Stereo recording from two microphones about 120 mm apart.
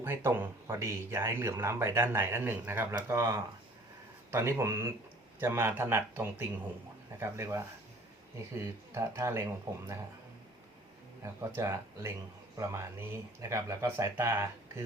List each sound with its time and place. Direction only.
0.0 s speech: 20° right (ahead or behind)
11.2 s speech: 25° right (ahead or behind)